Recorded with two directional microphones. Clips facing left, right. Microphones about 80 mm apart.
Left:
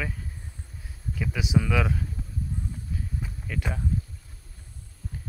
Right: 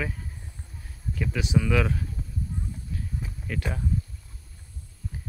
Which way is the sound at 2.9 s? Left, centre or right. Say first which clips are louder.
Even; centre.